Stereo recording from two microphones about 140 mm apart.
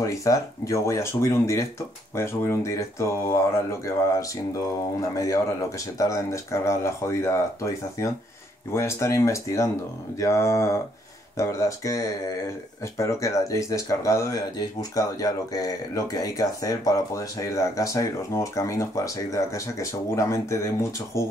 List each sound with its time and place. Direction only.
0.0 s speech: 20° left (ahead or behind)